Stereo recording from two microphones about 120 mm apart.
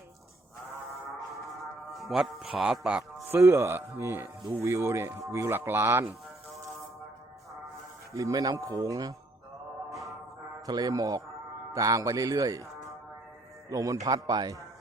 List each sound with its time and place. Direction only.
1.5 s music: centre (ahead or behind)
3.2 s a man's voice: 20° right (ahead or behind)
8.1 s a man's voice: 30° right (ahead or behind)
9.9 s music: centre (ahead or behind)
10.7 s a man's voice: 30° right (ahead or behind)